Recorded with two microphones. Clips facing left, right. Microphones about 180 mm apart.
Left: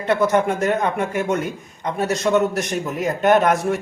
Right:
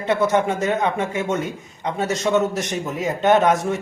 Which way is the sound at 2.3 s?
15° left (ahead or behind).